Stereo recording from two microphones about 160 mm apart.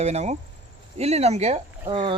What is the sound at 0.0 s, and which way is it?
Speech, 45° right (ahead or behind).